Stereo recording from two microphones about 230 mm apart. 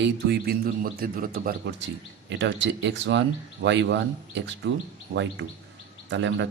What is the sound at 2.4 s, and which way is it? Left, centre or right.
Speech, right.